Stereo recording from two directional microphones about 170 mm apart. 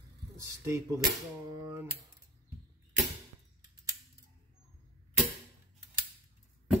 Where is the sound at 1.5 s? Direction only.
20° right (ahead or behind).